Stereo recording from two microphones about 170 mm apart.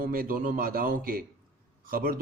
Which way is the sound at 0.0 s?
55° right (ahead or behind).